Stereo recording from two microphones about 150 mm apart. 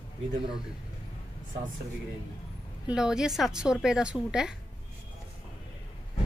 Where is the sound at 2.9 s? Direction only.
5° right (ahead or behind).